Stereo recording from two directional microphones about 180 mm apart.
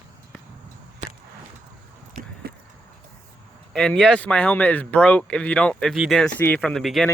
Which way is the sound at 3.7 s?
5° left (ahead or behind).